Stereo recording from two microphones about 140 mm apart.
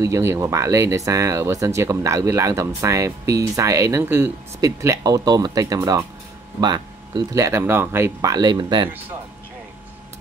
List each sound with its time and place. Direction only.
0.0 s speech: 20° right (ahead or behind)